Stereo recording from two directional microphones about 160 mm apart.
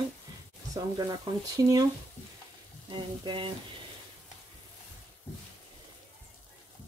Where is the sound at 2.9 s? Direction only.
30° right (ahead or behind).